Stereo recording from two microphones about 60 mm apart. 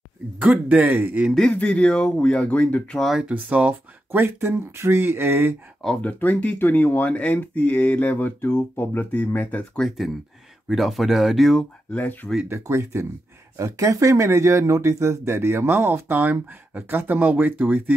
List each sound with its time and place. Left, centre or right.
0.4 s speech: centre
1.5 s speech: centre
3.3 s speech: right
4.2 s speech: right
5.9 s speech: left
9.8 s speech: centre
11.9 s speech: left
12.4 s speech: right
13.6 s speech: right